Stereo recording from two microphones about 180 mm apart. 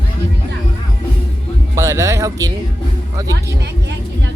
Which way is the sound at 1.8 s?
15° right (ahead or behind).